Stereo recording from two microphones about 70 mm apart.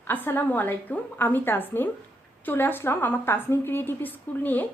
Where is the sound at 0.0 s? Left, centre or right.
Left.